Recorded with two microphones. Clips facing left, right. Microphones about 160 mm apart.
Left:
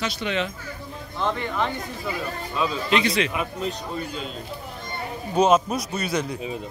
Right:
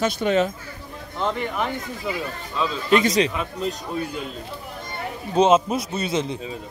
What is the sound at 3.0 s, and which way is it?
Speech, 40° right (ahead or behind).